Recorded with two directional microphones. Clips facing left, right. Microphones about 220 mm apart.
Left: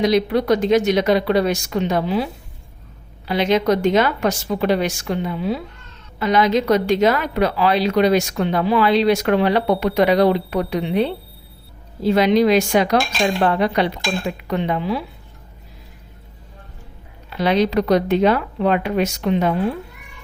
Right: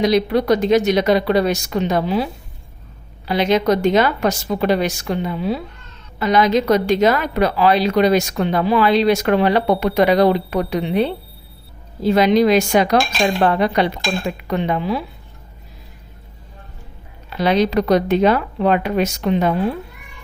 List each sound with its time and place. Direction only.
0.0 s a woman's voice: 35° right (ahead or behind)
3.2 s a woman's voice: 40° right (ahead or behind)
12.1 s a woman's voice: 40° right (ahead or behind)
17.2 s a woman's voice: 40° right (ahead or behind)